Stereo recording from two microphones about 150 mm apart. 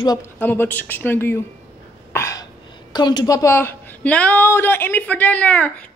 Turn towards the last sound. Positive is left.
turn(degrees=10)  # may be behind; listen again after turning